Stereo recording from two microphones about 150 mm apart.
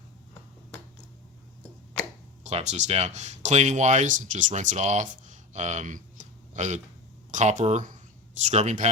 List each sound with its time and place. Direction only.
2.4 s speech: 50° right (ahead or behind)